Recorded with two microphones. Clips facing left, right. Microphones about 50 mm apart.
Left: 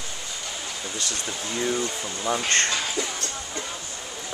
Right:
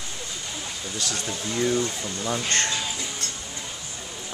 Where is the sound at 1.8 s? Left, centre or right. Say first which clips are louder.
Right 1 dB; centre.